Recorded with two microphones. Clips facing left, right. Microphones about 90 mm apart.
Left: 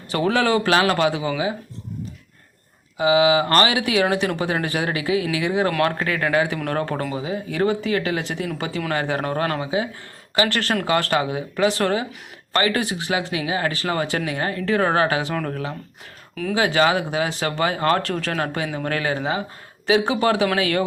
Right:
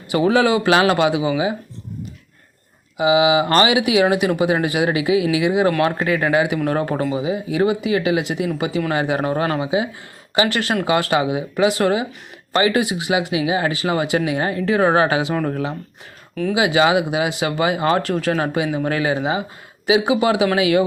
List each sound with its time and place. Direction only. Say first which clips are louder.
0.1 s speech: right 4 dB; 10° right (ahead or behind)
3.0 s speech: right 2 dB; 15° right (ahead or behind)
16.3 s speech: right 3 dB; 5° right (ahead or behind)